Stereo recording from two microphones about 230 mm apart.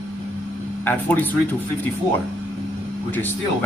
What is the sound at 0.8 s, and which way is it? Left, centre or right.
Speech, centre.